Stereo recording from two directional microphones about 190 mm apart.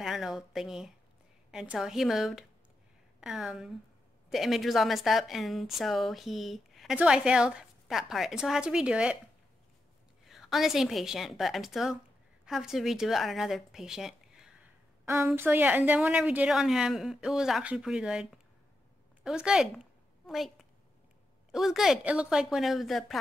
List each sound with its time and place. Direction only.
0.0 s a woman's voice: centre (ahead or behind)
10.2 s a woman's voice: centre (ahead or behind)